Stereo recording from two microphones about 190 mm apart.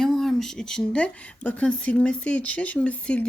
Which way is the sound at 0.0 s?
Centre (ahead or behind).